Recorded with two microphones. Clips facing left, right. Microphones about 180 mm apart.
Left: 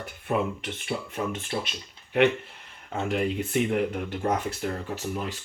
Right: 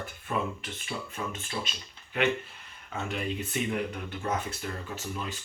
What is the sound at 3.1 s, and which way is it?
Speech, 75° left (ahead or behind).